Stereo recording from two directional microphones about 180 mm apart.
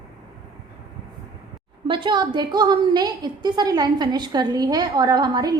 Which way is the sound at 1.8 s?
25° right (ahead or behind).